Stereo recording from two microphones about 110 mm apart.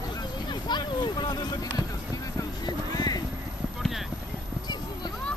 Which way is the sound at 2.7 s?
35° left (ahead or behind).